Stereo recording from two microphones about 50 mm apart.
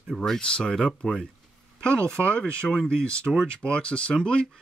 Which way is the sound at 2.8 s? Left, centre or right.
Centre.